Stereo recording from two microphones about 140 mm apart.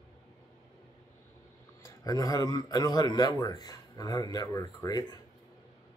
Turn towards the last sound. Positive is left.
turn(degrees=30)  # may be behind; listen again after turning